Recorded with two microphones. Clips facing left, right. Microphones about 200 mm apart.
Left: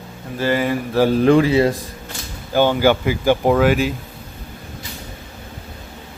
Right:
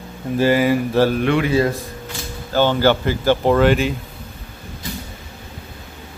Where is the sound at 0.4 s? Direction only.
10° right (ahead or behind).